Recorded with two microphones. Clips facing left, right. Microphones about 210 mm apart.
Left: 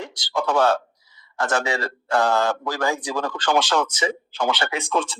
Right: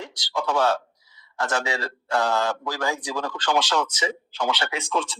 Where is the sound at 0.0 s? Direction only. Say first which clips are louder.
Left 3 dB; 50° left (ahead or behind).